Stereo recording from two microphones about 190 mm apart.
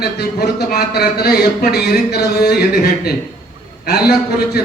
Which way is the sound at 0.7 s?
55° left (ahead or behind).